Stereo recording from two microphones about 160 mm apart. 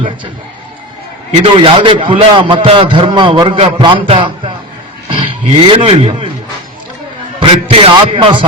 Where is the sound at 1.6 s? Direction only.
35° right (ahead or behind).